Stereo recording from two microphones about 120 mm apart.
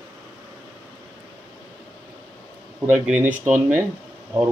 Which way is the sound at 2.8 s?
15° right (ahead or behind).